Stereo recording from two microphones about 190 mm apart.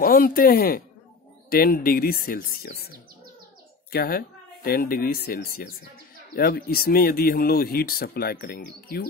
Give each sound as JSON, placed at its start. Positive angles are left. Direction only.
{"t": 0.0, "sound": "speech", "side_deg": 50}
{"t": 3.9, "sound": "a woman's voice", "side_deg": 50}